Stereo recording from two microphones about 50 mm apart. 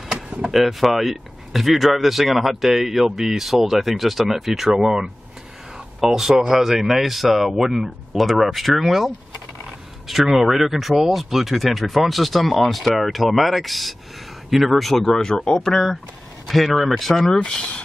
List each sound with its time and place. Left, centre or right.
0.1 s door: right
0.5 s a man's voice: centre
6.7 s speech: centre